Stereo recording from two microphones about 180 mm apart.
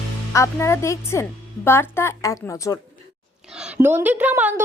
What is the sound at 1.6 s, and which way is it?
A woman's voice, 15° left (ahead or behind).